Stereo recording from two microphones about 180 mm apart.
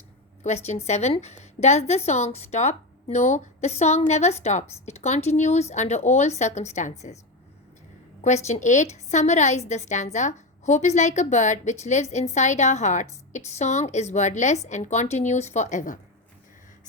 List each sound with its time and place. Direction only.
0.4 s a woman's voice: 40° left (ahead or behind)
8.2 s a woman's voice: 40° left (ahead or behind)